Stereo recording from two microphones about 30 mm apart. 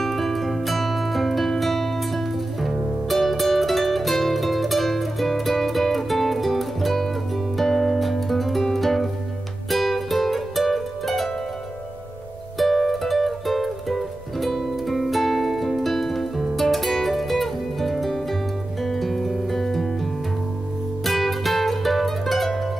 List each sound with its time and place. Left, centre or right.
0.0 s music: centre
12.5 s music: centre
21.0 s music: centre